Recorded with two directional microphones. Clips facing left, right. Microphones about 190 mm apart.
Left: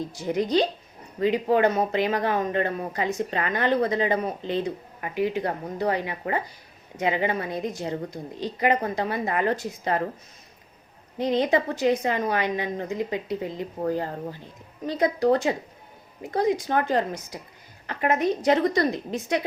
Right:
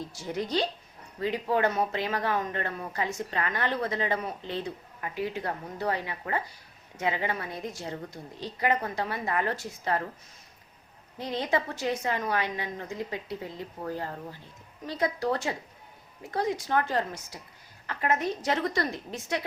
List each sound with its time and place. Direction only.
0.1 s a woman's voice: 15° left (ahead or behind)
11.2 s a woman's voice: 20° left (ahead or behind)